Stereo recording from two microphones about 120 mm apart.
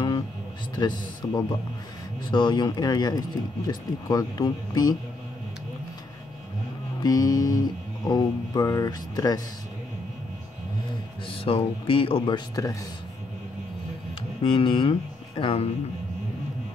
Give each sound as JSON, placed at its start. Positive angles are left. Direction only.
{"t": 0.7, "sound": "speech", "side_deg": 35}
{"t": 7.0, "sound": "speech", "side_deg": 30}
{"t": 11.2, "sound": "speech", "side_deg": 50}
{"t": 12.6, "sound": "speech", "side_deg": 30}
{"t": 14.4, "sound": "speech", "side_deg": 45}